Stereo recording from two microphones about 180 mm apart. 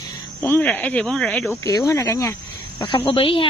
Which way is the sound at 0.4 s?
10° left (ahead or behind).